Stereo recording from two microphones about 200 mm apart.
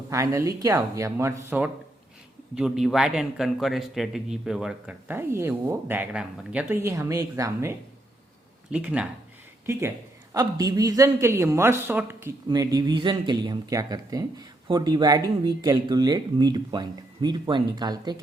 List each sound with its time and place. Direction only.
0.1 s a man's voice: 15° right (ahead or behind)
10.3 s speech: 20° right (ahead or behind)